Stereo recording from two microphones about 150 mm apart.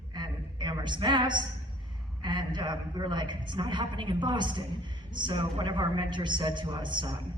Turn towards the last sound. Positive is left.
turn(degrees=-30)  # may be behind; listen again after turning